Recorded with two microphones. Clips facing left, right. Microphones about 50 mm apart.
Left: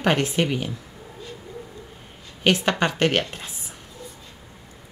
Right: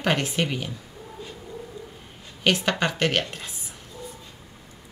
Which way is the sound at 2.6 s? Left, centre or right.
Centre.